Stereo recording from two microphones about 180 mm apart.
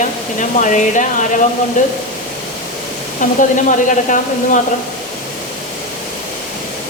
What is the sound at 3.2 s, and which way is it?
Speech, 45° left (ahead or behind).